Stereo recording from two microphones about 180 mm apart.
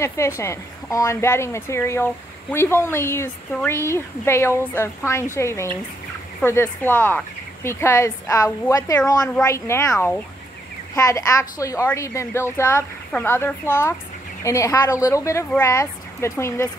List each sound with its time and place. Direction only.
0.0 s a woman's voice: 15° left (ahead or behind)